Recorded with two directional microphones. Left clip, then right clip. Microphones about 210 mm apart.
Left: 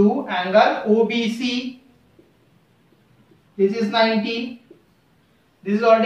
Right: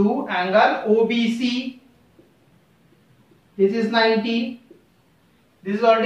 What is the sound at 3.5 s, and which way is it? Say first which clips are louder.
Speech: even; 15° right (ahead or behind).